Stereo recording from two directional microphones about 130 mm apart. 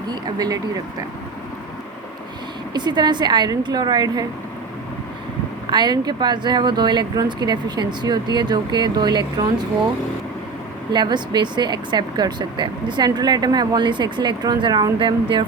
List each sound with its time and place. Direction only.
0.1 s speech: 30° right (ahead or behind)
2.7 s speech: 35° right (ahead or behind)
5.7 s speech: 35° right (ahead or behind)
10.9 s speech: 35° right (ahead or behind)